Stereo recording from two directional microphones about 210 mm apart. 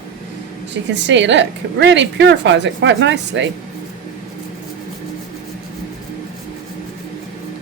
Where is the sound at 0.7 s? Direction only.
55° right (ahead or behind).